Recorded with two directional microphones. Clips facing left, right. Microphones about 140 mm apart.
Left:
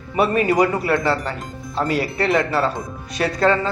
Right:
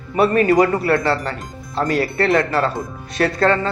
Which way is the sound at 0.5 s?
20° left (ahead or behind).